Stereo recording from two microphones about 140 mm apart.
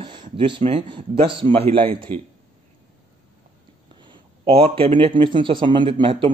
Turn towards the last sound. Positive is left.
turn(degrees=-35)  # may be behind; listen again after turning